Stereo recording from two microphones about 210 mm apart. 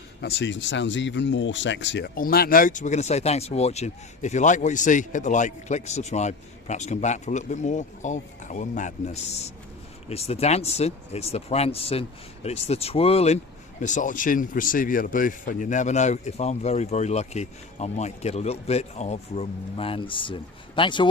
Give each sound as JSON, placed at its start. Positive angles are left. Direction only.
{"t": 0.2, "sound": "speech", "side_deg": 55}